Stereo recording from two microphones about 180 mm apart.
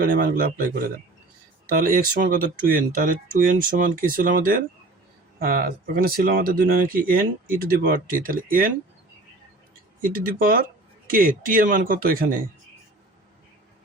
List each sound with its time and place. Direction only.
0.0 s speech: 50° right (ahead or behind)
1.7 s speech: 55° right (ahead or behind)
10.0 s speech: 50° right (ahead or behind)